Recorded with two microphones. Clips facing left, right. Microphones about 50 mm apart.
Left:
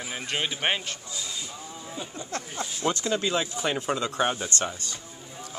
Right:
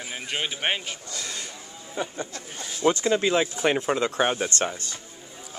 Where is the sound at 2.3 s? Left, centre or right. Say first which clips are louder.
Left 5 dB; left.